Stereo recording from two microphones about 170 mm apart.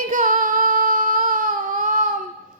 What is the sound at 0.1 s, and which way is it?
Child singing, 50° right (ahead or behind).